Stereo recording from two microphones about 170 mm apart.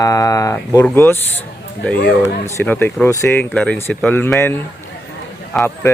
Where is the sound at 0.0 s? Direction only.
20° left (ahead or behind).